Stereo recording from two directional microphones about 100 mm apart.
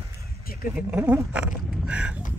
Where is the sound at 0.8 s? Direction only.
15° right (ahead or behind).